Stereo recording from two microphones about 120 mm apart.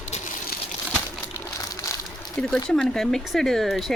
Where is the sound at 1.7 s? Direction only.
30° left (ahead or behind).